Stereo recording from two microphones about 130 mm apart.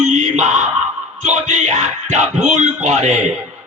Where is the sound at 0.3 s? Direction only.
60° right (ahead or behind).